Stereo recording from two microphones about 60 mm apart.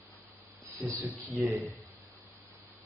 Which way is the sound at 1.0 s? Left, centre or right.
Right.